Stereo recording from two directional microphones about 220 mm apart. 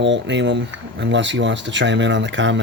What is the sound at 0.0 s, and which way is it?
Speech, 55° right (ahead or behind).